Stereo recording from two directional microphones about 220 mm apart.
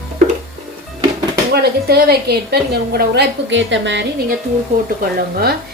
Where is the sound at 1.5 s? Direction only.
45° right (ahead or behind).